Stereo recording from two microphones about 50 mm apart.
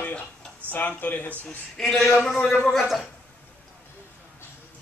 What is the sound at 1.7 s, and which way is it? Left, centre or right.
Speech, centre.